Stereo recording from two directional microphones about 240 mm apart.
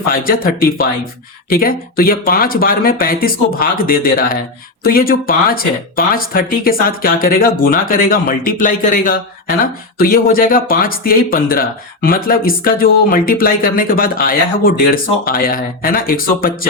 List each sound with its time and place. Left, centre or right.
0.1 s speech: left